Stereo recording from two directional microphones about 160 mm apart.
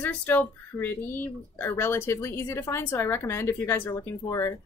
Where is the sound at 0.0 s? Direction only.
10° left (ahead or behind).